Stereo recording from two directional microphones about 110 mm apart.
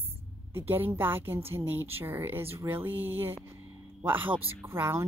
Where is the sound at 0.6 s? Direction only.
20° right (ahead or behind).